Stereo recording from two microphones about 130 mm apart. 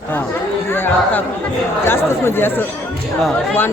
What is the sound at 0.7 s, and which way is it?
Speech, 15° left (ahead or behind).